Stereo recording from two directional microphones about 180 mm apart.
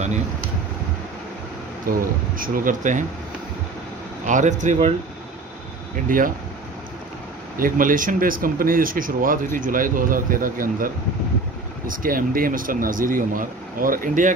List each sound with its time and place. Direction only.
1.9 s speech: 50° right (ahead or behind)
4.3 s speech: 45° right (ahead or behind)
6.0 s speech: 50° right (ahead or behind)
7.5 s speech: 50° right (ahead or behind)
11.9 s speech: 50° right (ahead or behind)